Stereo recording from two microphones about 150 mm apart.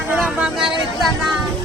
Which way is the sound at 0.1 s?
5° right (ahead or behind).